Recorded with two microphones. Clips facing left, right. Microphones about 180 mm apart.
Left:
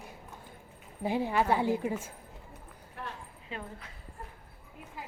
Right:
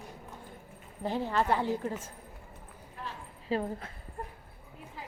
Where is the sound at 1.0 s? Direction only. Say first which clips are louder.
Left 1 dB; 10° left (ahead or behind).